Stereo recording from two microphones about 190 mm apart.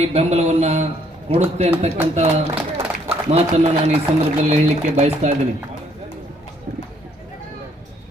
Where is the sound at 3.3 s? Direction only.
35° right (ahead or behind).